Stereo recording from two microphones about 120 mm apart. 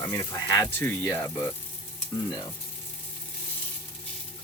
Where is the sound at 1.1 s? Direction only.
20° left (ahead or behind).